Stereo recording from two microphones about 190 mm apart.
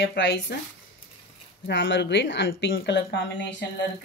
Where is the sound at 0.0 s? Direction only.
70° left (ahead or behind).